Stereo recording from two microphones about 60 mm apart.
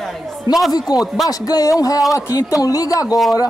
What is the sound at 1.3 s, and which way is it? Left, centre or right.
Speech, left.